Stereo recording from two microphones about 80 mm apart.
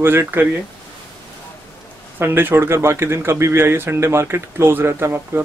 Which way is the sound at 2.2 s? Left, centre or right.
Right.